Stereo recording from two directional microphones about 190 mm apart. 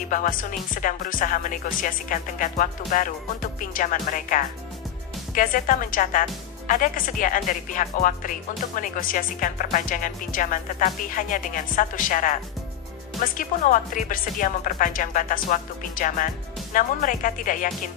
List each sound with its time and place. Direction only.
0.1 s speech: 45° left (ahead or behind)